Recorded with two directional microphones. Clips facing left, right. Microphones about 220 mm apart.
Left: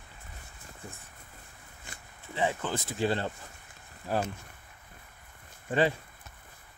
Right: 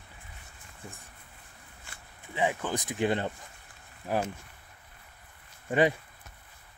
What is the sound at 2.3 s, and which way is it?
Speech, 15° right (ahead or behind).